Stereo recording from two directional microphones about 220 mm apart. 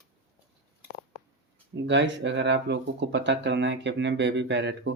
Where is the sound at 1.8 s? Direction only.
55° right (ahead or behind).